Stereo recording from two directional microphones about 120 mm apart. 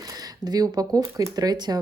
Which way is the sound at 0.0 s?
35° right (ahead or behind).